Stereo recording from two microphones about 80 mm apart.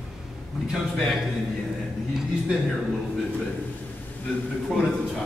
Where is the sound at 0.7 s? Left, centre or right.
Centre.